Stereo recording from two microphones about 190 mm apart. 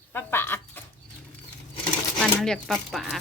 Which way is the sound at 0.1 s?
10° left (ahead or behind).